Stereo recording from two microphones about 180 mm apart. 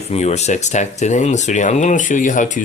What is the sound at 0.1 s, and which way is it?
Speech, 35° left (ahead or behind).